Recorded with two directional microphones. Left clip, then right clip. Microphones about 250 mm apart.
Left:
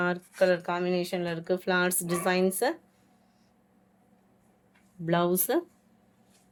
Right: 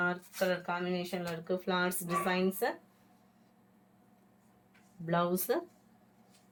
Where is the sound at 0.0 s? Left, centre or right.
Left.